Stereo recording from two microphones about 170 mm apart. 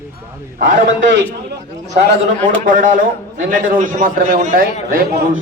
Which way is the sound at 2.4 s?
50° right (ahead or behind).